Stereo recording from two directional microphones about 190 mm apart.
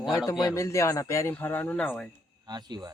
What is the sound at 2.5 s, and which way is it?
Speech, 20° right (ahead or behind).